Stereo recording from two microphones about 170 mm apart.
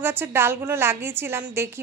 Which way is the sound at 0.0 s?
15° right (ahead or behind).